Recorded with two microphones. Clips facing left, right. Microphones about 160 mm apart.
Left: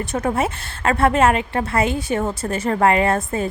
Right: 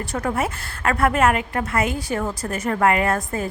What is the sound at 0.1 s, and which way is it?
A woman's voice, 25° left (ahead or behind).